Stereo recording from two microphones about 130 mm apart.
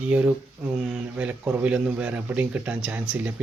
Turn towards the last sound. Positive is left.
turn(degrees=-15)  # may be behind; listen again after turning